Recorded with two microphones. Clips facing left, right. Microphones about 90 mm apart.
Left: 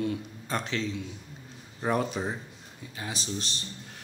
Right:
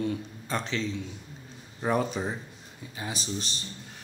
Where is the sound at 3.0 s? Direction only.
10° right (ahead or behind).